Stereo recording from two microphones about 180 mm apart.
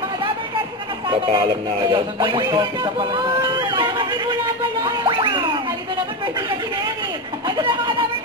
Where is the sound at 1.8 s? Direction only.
25° right (ahead or behind).